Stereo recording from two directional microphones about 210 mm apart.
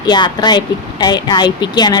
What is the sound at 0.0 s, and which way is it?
A woman's voice, 20° left (ahead or behind).